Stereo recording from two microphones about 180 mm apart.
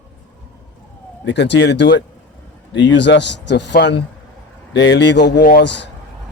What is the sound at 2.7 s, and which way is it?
Speech, 85° left.